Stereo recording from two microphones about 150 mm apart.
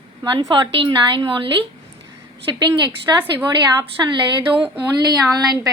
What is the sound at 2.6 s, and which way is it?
A woman's voice, 30° right (ahead or behind).